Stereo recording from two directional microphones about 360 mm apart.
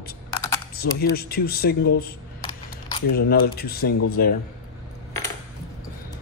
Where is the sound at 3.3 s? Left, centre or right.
Left.